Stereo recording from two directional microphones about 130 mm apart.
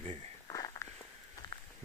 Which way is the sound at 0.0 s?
55° right (ahead or behind).